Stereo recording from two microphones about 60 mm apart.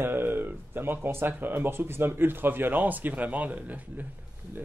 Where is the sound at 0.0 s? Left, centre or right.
Right.